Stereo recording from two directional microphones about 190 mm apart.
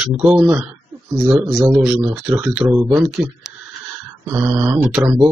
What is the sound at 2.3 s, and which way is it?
Speech, 15° right (ahead or behind).